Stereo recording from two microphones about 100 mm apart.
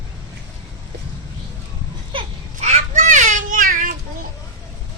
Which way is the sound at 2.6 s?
90° right.